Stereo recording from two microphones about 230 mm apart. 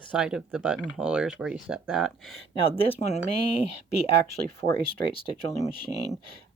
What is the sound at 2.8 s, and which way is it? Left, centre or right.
Speech, left.